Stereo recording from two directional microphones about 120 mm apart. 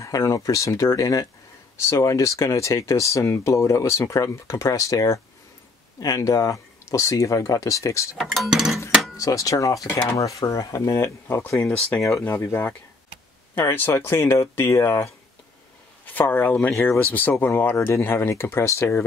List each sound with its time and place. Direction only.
0.0 s speech: 25° left (ahead or behind)
8.2 s speech: centre (ahead or behind)
9.1 s speech: 30° left (ahead or behind)